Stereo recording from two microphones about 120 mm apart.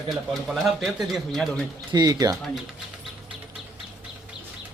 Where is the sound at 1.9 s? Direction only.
30° right (ahead or behind).